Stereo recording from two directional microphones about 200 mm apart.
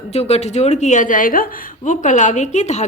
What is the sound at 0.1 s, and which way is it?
A woman's voice, 30° left (ahead or behind).